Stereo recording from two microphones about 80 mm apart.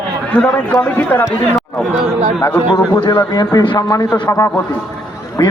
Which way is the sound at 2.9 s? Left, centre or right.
Left.